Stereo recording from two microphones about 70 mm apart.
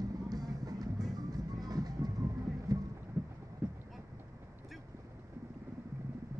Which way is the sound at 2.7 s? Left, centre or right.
Right.